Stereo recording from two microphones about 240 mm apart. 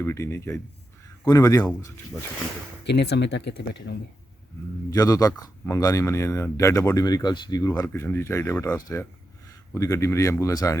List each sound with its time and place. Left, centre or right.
0.0 s speech: centre
2.8 s speech: left
4.9 s speech: centre